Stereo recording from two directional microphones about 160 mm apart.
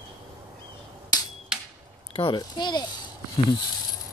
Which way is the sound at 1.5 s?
5° right (ahead or behind).